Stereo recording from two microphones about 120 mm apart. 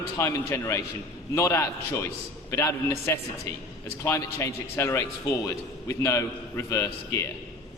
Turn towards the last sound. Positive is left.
turn(degrees=25)  # may be behind; listen again after turning